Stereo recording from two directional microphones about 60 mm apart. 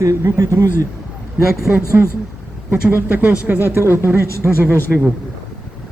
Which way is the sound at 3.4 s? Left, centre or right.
Right.